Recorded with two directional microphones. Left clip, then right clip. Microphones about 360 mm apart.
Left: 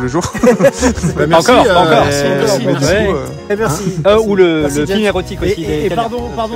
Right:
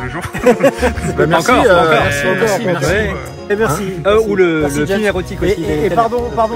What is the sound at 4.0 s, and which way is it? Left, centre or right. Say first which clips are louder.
Speech: left 3 dB; left.